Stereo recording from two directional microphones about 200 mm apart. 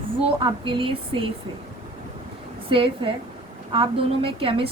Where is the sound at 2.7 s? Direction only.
25° right (ahead or behind).